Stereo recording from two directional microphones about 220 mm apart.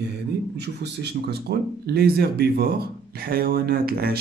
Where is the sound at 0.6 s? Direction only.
50° right (ahead or behind).